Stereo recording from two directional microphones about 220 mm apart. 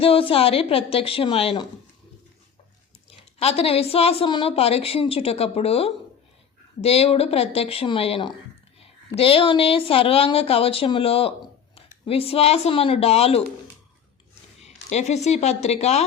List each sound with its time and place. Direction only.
0.0 s speech: 25° left (ahead or behind)
3.3 s speech: 25° left (ahead or behind)
14.6 s speech: 30° left (ahead or behind)